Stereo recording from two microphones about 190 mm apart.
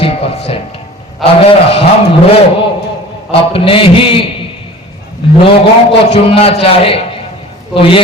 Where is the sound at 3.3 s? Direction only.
30° left (ahead or behind).